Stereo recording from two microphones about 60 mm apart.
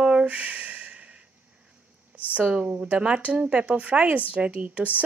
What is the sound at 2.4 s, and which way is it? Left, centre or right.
A woman's voice, centre.